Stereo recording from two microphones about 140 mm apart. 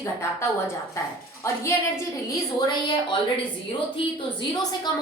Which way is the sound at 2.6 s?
35° left (ahead or behind).